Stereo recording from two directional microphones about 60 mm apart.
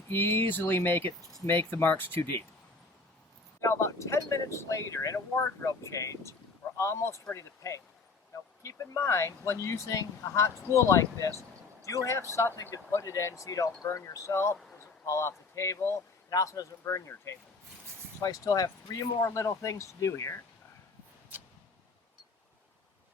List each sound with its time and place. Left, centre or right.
0.1 s speech: left
3.6 s speech: left
6.7 s speech: left
7.3 s speech: left
13.8 s speech: left
14.1 s speech: left
16.3 s speech: left
18.2 s speech: left
21.3 s a sound: right